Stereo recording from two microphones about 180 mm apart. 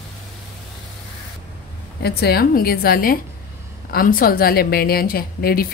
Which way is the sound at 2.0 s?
60° left (ahead or behind).